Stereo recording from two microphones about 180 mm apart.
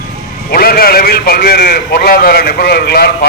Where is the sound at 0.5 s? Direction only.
55° left (ahead or behind).